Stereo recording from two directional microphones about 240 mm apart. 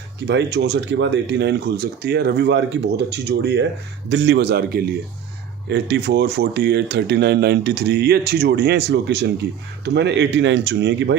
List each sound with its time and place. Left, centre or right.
0.3 s speech: right